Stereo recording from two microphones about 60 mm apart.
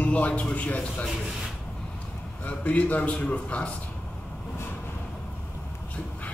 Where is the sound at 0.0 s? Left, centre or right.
Left.